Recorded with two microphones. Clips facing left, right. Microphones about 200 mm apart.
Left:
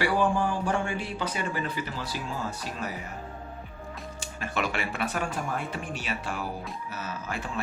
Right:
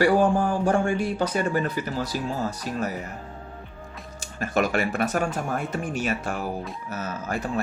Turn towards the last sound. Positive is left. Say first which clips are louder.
# right 5 dB
turn(degrees=-45)  # may be behind; listen again after turning